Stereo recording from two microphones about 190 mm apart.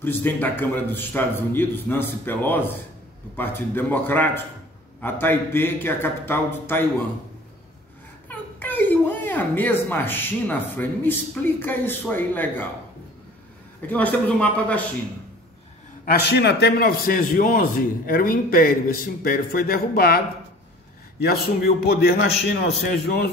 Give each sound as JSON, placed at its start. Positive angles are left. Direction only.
{"t": 0.0, "sound": "speech", "side_deg": 10}
{"t": 8.3, "sound": "speech", "side_deg": 10}
{"t": 13.8, "sound": "speech", "side_deg": 10}
{"t": 16.1, "sound": "a man's voice", "side_deg": 60}